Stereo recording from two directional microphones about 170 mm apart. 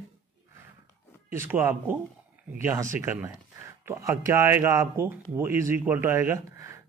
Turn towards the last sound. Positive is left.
turn(degrees=-15)  # may be behind; listen again after turning